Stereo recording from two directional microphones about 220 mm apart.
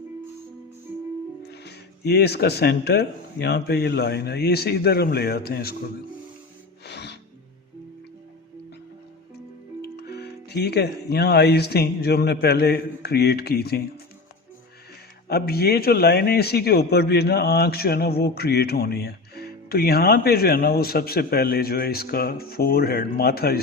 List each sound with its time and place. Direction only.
1.4 s a man's voice: 50° left (ahead or behind)
6.8 s music: 50° left (ahead or behind)
9.8 s a man's voice: 45° left (ahead or behind)
15.3 s a man's voice: 45° left (ahead or behind)